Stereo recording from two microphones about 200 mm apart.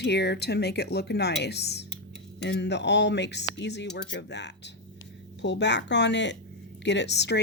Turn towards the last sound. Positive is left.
turn(degrees=60)  # may be behind; listen again after turning